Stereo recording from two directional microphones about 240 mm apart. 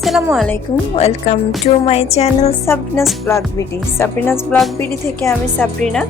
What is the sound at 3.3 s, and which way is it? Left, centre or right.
Music, centre.